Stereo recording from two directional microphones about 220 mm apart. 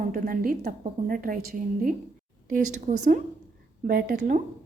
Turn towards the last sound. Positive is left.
turn(degrees=-35)  # may be behind; listen again after turning